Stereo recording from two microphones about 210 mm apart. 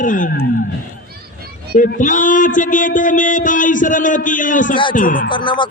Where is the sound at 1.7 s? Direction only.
40° left (ahead or behind).